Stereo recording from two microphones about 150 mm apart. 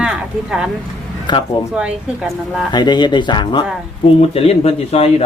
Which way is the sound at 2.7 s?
30° left (ahead or behind).